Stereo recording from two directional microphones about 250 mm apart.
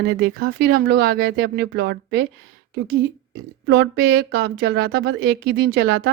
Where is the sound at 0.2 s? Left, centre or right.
Right.